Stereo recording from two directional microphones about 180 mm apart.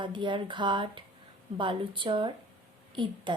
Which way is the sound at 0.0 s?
25° right (ahead or behind).